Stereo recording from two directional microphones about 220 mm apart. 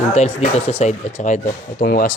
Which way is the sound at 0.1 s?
30° left (ahead or behind).